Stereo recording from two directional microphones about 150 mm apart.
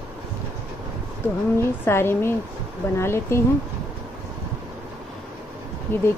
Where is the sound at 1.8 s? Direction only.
15° left (ahead or behind).